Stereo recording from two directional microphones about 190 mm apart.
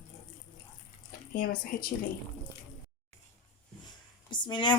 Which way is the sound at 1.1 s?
50° left (ahead or behind).